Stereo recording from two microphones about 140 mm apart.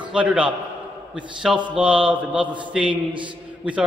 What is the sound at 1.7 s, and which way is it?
A man's voice, 10° right (ahead or behind).